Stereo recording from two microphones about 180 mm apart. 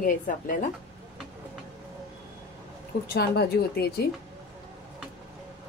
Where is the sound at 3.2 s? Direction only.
60° left (ahead or behind).